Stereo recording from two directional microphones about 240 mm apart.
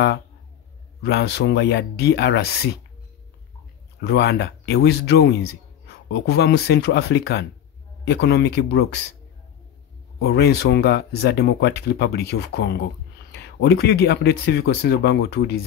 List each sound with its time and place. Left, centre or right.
1.0 s speech: left
4.0 s speech: left
10.2 s speech: left